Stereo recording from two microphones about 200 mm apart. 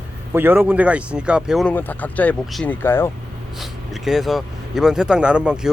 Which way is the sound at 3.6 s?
Centre (ahead or behind).